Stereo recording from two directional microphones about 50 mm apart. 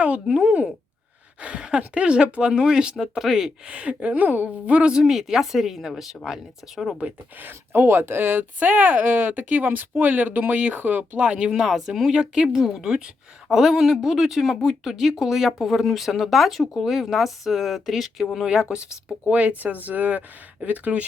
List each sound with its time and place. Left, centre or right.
0.0 s a woman's voice: right; by 3.5 s centre
3.7 s a woman's voice: right
5.1 s speech: centre
7.4 s speech: right
11.2 s a woman's voice: right
11.5 s speech: centre
18.7 s speech: centre